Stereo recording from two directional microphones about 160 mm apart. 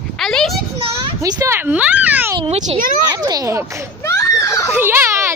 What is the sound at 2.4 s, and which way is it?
Speech, 35° right (ahead or behind).